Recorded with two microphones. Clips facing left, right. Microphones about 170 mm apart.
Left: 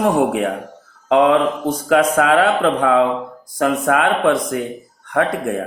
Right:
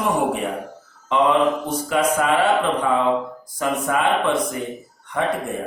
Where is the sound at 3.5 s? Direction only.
65° left (ahead or behind).